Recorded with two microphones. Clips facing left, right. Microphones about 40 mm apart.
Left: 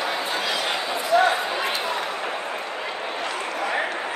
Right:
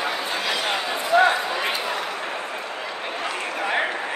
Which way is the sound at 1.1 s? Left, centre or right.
Right.